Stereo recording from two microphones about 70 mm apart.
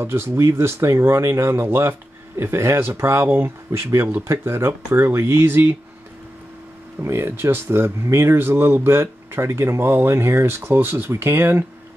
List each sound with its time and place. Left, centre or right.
0.0 s speech: right
7.0 s speech: right